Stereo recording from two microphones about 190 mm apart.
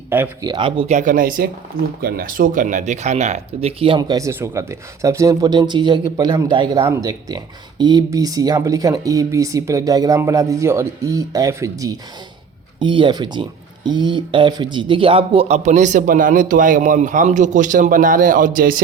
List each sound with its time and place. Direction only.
0.1 s speech: 10° right (ahead or behind)
0.5 s speech: 30° right (ahead or behind); by 18.8 s 45° right (ahead or behind)